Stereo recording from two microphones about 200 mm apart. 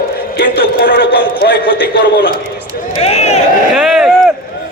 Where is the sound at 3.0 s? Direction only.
30° left (ahead or behind).